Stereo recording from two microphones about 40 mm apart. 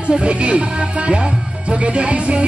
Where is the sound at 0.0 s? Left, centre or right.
Right.